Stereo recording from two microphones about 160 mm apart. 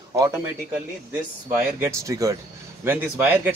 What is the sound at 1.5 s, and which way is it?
Speech, 15° right (ahead or behind).